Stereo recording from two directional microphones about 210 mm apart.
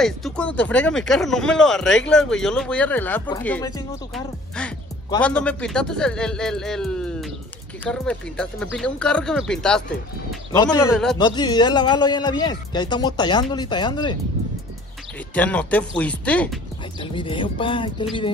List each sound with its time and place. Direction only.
0.0 s speech: 5° left (ahead or behind)
10.5 s a man's voice: 20° left (ahead or behind)
10.9 s speech: centre (ahead or behind)
11.1 s a man's voice: 20° left (ahead or behind)
15.3 s speech: 5° left (ahead or behind)
17.0 s a man's voice: 25° left (ahead or behind)